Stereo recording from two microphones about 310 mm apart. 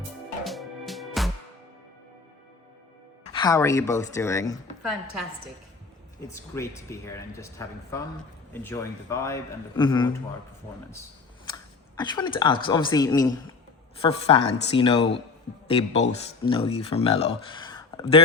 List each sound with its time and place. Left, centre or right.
0.4 s music: centre
3.3 s speech: centre
6.3 s speech: centre
11.4 s speech: centre